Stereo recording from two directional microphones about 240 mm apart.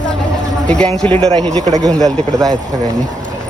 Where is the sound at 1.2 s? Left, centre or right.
Right.